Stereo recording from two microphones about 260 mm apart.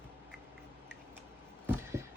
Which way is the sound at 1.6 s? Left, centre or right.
Centre.